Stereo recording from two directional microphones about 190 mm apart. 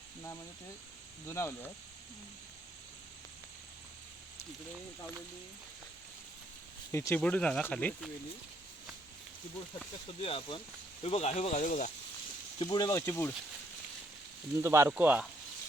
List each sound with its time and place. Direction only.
1.3 s speech: 15° left (ahead or behind)
6.9 s speech: 15° left (ahead or behind)
10.2 s speech: 30° left (ahead or behind)
12.5 s speech: 20° left (ahead or behind)
14.5 s speech: 15° right (ahead or behind)